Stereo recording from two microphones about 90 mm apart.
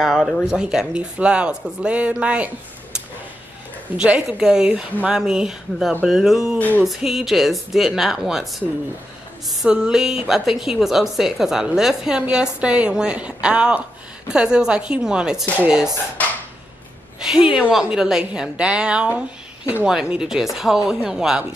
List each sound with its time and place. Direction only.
0.0 s a woman's voice: centre (ahead or behind)
3.9 s a woman's voice: 10° right (ahead or behind)
16.2 s a sound: 15° left (ahead or behind)
17.2 s a woman's voice: 10° right (ahead or behind)